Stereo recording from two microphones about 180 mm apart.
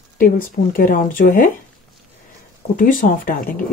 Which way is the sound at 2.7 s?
50° left (ahead or behind).